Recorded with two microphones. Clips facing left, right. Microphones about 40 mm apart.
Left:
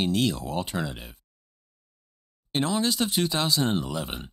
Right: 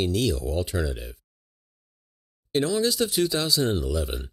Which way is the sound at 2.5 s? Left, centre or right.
Centre.